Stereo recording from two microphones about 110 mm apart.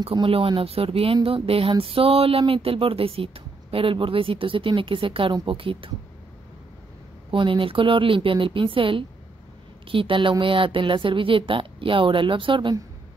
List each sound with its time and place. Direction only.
0.0 s speech: 55° right (ahead or behind)
7.2 s speech: 50° right (ahead or behind)